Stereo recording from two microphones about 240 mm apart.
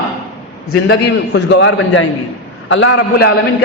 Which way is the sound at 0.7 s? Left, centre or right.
Left.